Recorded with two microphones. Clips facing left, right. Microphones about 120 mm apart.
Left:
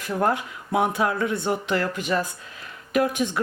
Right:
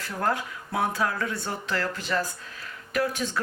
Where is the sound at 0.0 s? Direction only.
20° left (ahead or behind).